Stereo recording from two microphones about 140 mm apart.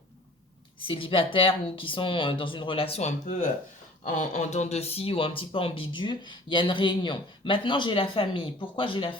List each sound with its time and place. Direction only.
0.8 s speech: 40° left (ahead or behind)